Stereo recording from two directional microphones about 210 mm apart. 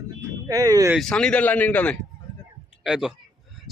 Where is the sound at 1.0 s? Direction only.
5° left (ahead or behind).